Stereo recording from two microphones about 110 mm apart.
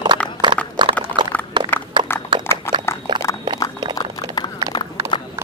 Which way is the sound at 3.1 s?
40° right (ahead or behind).